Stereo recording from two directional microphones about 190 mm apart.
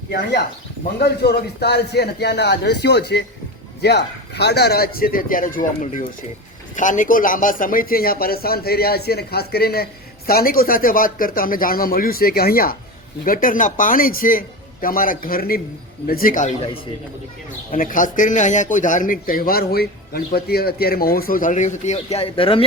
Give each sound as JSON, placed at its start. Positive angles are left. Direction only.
{"t": 0.1, "sound": "a man's voice", "side_deg": 60}
{"t": 17.7, "sound": "speech", "side_deg": 45}